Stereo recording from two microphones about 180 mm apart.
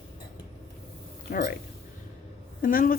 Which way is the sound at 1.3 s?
65° left (ahead or behind).